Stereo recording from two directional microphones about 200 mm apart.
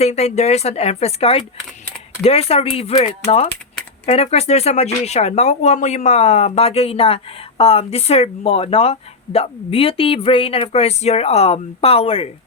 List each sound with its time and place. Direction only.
0.0 s speech: 35° left (ahead or behind)